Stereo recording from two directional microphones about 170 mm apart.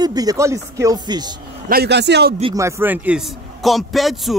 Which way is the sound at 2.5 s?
15° right (ahead or behind).